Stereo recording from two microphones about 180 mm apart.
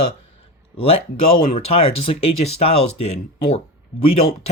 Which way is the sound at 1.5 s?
35° left (ahead or behind).